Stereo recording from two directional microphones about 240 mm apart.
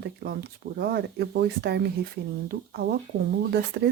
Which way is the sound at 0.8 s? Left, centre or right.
Right.